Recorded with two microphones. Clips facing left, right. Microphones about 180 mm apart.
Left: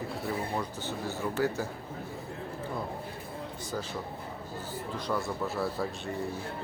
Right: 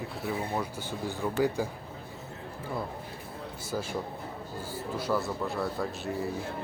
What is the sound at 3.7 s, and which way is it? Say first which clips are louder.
Speech: right 4 dB; 10° right (ahead or behind).